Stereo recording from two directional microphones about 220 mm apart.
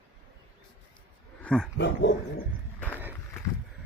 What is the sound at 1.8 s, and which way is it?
Speech, 50° left (ahead or behind).